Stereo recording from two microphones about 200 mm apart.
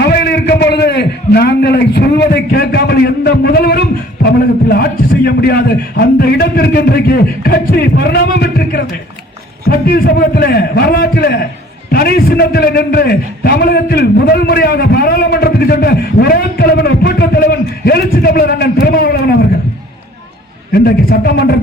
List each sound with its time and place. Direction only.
0.0 s a man's voice: 55° left (ahead or behind)
20.7 s a man's voice: 50° left (ahead or behind)